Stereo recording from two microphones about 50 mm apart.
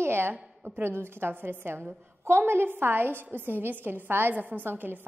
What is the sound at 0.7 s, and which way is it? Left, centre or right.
A woman's voice, right.